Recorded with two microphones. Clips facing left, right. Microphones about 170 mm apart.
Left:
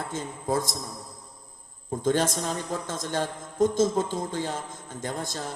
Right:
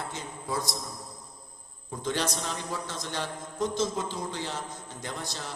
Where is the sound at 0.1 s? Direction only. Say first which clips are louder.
Left 6 dB; 50° left (ahead or behind).